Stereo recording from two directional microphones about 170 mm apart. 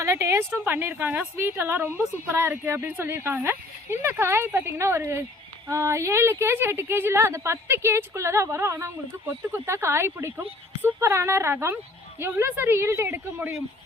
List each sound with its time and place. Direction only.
0.0 s a woman's voice: 15° right (ahead or behind)